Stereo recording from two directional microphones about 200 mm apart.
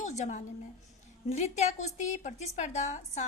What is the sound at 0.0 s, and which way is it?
A woman's voice, 35° left (ahead or behind).